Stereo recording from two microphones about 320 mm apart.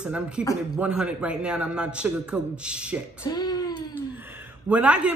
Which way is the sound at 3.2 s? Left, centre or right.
Centre.